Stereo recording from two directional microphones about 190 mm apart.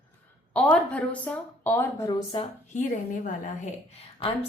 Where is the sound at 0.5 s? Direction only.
5° left (ahead or behind).